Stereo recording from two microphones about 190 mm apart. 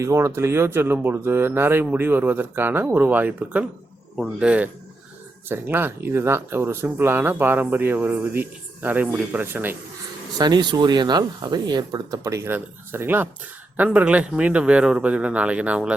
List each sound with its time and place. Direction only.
0.0 s speech: 15° right (ahead or behind)
10.3 s speech: 20° right (ahead or behind); by 16.0 s 5° right (ahead or behind)